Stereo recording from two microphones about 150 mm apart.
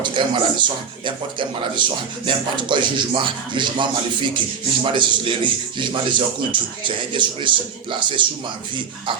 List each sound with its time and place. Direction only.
0.2 s a man's voice: 30° right (ahead or behind)